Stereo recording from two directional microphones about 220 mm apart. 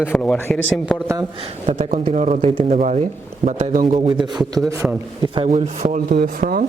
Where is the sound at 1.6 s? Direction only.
35° right (ahead or behind).